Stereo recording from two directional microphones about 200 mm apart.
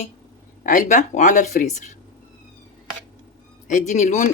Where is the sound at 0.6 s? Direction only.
40° left (ahead or behind).